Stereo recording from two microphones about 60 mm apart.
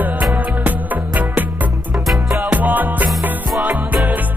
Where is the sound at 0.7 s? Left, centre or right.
Right.